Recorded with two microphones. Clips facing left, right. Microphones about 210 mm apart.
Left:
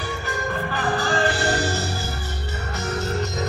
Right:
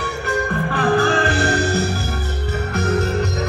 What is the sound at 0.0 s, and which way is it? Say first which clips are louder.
Music: right 5 dB; 65° right (ahead or behind).